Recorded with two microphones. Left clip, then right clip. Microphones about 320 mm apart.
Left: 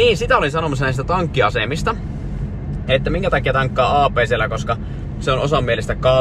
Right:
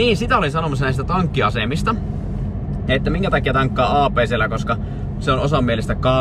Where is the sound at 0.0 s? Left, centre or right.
Centre.